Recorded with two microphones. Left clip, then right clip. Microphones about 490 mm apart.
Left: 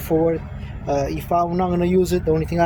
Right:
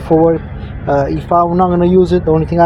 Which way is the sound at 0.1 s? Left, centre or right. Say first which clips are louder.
Right 9 dB; left.